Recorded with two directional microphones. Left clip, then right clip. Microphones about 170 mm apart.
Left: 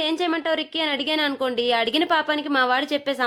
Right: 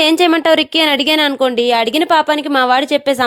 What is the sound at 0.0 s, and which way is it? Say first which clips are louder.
A woman's voice: right 12 dB; 65° right (ahead or behind).